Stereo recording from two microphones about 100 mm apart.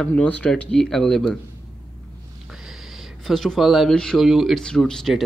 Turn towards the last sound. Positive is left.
turn(degrees=5)  # may be behind; listen again after turning